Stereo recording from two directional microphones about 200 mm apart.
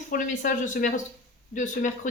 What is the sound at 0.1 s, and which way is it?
Speech, 40° left (ahead or behind).